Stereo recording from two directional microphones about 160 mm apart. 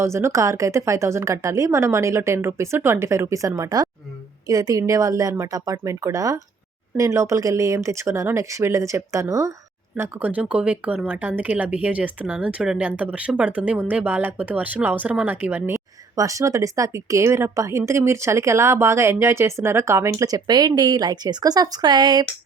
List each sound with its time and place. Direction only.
0.0 s speech: 15° right (ahead or behind)